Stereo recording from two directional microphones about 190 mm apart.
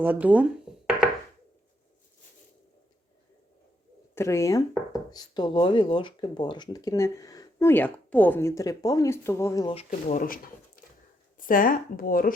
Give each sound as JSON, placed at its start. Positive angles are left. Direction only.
{"t": 0.0, "sound": "speech", "side_deg": -10}
{"t": 4.1, "sound": "speech", "side_deg": 15}
{"t": 9.7, "sound": "speech", "side_deg": 40}